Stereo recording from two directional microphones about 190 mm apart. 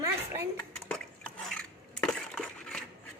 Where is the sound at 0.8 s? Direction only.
5° left (ahead or behind).